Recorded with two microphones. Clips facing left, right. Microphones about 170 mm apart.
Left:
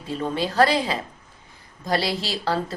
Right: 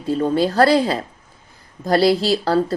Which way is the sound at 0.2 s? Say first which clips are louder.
Right 4 dB; 40° right (ahead or behind).